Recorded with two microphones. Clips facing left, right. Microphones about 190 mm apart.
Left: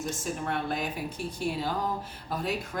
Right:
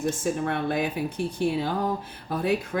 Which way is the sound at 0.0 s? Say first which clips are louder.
Right 7 dB; 60° right (ahead or behind).